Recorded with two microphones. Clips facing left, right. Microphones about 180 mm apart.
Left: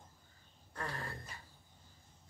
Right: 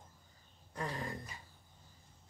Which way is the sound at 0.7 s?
15° right (ahead or behind).